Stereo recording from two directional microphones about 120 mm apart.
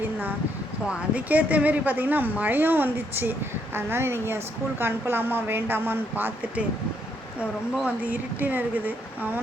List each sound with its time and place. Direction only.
0.9 s a woman's voice: 10° right (ahead or behind)
8.0 s a woman's voice: 15° right (ahead or behind)